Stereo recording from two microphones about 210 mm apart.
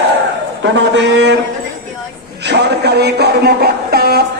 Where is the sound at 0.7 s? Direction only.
60° right (ahead or behind).